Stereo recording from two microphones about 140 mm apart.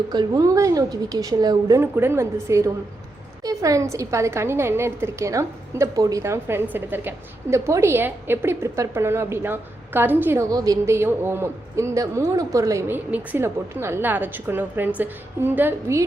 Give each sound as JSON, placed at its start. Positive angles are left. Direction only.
{"t": 0.1, "sound": "a woman's voice", "side_deg": -25}